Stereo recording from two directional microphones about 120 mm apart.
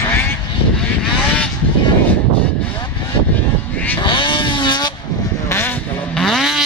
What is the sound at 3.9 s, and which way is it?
Vehicle, 40° left (ahead or behind).